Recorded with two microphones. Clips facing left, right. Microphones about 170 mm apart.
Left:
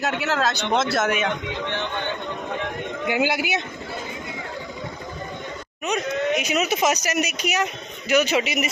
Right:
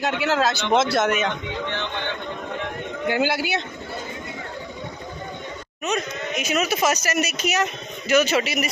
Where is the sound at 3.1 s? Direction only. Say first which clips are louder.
Right 1 dB; 15° left (ahead or behind).